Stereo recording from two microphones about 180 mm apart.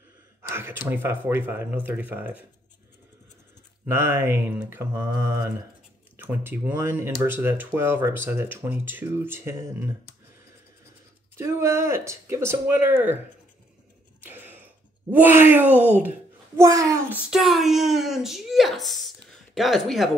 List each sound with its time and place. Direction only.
0.4 s speech: 15° right (ahead or behind)
3.8 s speech: 15° right (ahead or behind)
11.3 s speech: 15° right (ahead or behind)
14.2 s a sound: 10° right (ahead or behind)
16.5 s speech: 15° right (ahead or behind)
17.3 s speech: centre (ahead or behind)